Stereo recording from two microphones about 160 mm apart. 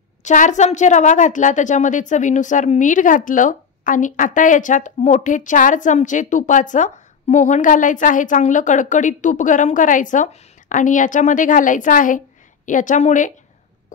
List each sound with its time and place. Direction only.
0.2 s a woman's voice: 50° left (ahead or behind)